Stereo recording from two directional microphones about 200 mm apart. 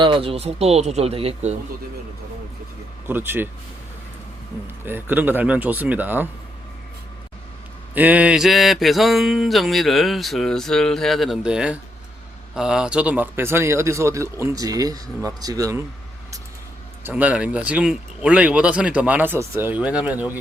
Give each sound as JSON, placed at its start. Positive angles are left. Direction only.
{"t": 0.0, "sound": "speech", "side_deg": -25}
{"t": 3.1, "sound": "speech", "side_deg": -10}
{"t": 4.9, "sound": "speech", "side_deg": -10}
{"t": 7.9, "sound": "mantra", "side_deg": -10}
{"t": 12.5, "sound": "speech", "side_deg": -5}
{"t": 17.0, "sound": "speech", "side_deg": -10}